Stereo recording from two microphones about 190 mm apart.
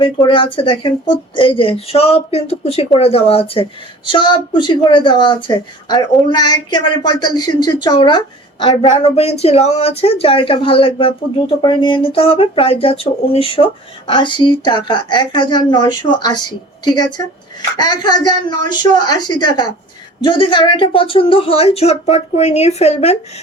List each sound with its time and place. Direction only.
0.0 s a woman's voice: 25° left (ahead or behind)
17.7 s a woman's voice: 20° left (ahead or behind)